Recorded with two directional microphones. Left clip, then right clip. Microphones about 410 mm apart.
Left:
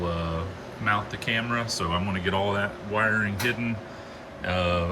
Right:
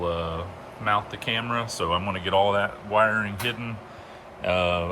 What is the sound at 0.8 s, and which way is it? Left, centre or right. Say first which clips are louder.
Speech: right 1 dB; centre.